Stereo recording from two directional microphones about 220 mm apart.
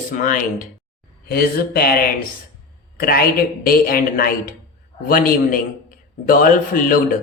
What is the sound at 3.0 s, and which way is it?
Speech, 40° left (ahead or behind).